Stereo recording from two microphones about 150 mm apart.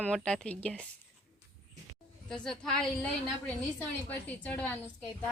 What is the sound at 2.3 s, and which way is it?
Speech, 5° left (ahead or behind).